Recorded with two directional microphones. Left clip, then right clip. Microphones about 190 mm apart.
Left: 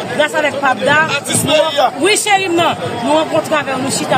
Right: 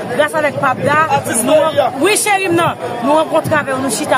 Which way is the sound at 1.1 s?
25° right (ahead or behind).